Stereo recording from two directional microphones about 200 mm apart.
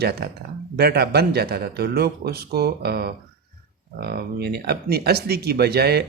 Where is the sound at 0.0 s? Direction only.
55° right (ahead or behind).